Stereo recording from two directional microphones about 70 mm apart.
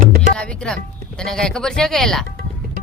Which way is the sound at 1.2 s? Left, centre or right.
Centre.